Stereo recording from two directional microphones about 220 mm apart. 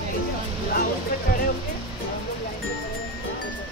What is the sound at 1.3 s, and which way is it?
Music, 45° left (ahead or behind).